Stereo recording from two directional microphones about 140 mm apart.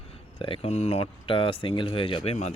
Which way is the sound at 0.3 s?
40° left (ahead or behind).